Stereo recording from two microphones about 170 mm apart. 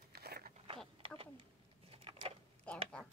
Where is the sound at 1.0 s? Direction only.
30° right (ahead or behind).